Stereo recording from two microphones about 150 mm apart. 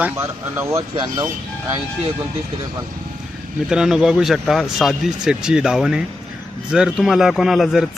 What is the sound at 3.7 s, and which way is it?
Speech, 5° right (ahead or behind).